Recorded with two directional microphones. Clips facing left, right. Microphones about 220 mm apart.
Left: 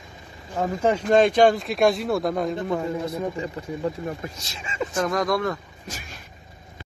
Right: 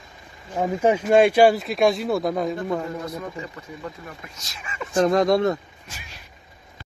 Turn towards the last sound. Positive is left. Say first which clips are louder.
# left 5 dB
turn(degrees=45)  # may be behind; listen again after turning